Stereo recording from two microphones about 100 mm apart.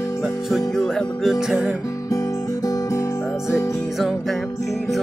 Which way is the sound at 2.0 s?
30° left (ahead or behind).